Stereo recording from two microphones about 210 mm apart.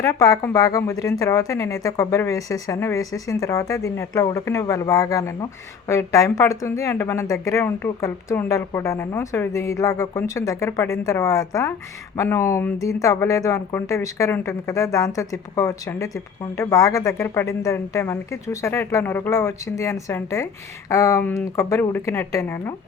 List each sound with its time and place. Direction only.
0.0 s speech: 15° left (ahead or behind)